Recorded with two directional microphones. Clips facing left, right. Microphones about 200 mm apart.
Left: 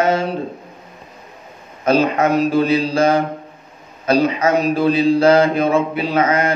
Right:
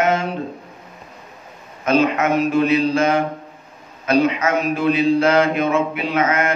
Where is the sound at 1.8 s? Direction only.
35° left (ahead or behind).